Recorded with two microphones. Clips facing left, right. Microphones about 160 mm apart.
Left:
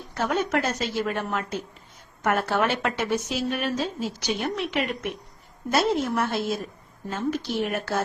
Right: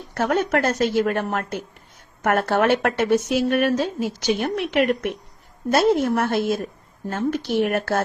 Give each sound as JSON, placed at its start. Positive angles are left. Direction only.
{"t": 0.1, "sound": "a woman's voice", "side_deg": -55}